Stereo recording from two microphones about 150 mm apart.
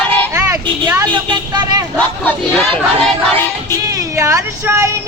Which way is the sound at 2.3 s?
5° left (ahead or behind).